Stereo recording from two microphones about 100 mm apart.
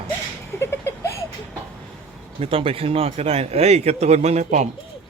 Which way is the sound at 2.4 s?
70° right (ahead or behind).